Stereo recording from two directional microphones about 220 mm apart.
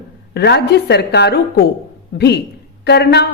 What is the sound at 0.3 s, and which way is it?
A woman's voice, 50° left (ahead or behind).